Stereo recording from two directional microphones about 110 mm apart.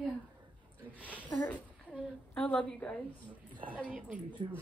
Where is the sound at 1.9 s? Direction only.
10° left (ahead or behind).